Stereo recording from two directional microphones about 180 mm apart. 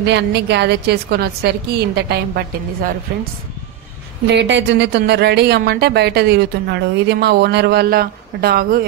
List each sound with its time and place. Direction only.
0.0 s speech: 70° right (ahead or behind)
4.3 s speech: 75° right (ahead or behind); by 8.8 s 55° right (ahead or behind)